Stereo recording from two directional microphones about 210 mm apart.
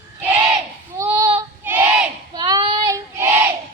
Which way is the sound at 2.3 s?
20° right (ahead or behind).